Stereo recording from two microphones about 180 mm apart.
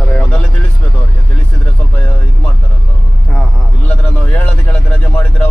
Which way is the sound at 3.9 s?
10° left (ahead or behind).